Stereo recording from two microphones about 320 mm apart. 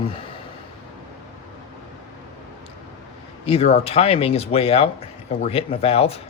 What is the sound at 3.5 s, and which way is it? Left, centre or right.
Speech, centre.